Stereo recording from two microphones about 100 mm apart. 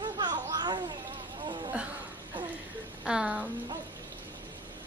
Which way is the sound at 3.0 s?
10° right (ahead or behind).